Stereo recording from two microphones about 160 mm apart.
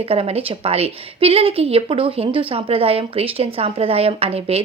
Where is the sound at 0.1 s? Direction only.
40° right (ahead or behind).